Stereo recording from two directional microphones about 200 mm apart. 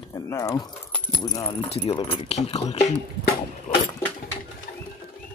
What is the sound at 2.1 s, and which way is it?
Speech, 30° left (ahead or behind).